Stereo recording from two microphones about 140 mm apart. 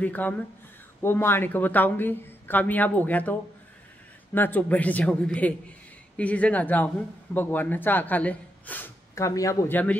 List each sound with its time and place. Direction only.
0.0 s speech: 10° left (ahead or behind)